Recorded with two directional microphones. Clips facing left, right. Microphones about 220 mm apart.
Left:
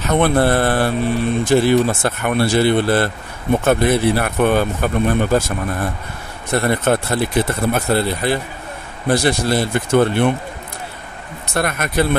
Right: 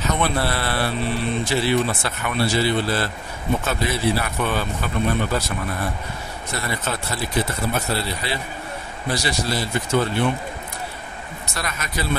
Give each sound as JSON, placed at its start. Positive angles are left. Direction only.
{"t": 0.1, "sound": "speech", "side_deg": 55}
{"t": 11.5, "sound": "speech", "side_deg": 55}